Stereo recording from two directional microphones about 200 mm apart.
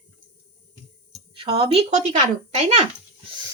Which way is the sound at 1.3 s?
25° right (ahead or behind).